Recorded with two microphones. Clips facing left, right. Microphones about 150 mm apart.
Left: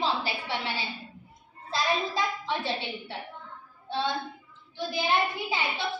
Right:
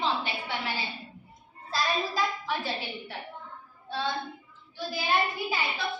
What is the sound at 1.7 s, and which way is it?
A woman's voice, 25° left (ahead or behind).